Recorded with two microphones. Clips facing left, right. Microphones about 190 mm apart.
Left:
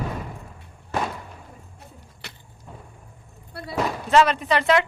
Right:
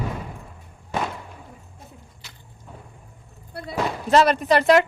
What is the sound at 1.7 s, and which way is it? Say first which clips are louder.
Vehicle: even; 65° left (ahead or behind).